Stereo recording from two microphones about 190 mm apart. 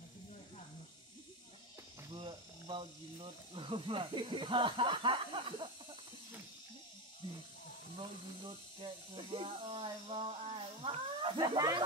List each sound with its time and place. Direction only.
2.1 s speech: 25° right (ahead or behind)
7.2 s snake: 25° right (ahead or behind)
8.5 s speech: 25° right (ahead or behind)